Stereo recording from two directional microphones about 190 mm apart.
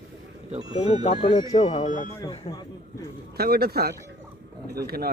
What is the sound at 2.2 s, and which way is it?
Speech, 25° left (ahead or behind).